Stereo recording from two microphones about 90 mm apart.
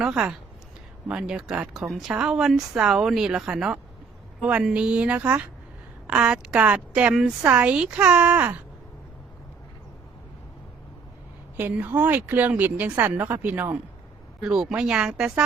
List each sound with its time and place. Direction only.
0.0 s speech: 10° right (ahead or behind)
11.5 s speech: 20° right (ahead or behind)
14.4 s speech: 5° right (ahead or behind)